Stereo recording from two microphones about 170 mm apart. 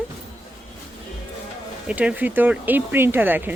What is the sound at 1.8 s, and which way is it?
Speech, 5° right (ahead or behind).